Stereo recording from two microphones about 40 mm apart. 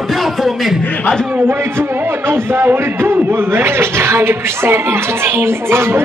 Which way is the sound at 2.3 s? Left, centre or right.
Right.